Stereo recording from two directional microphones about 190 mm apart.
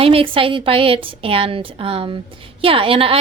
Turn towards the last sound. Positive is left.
turn(degrees=-30)  # may be behind; listen again after turning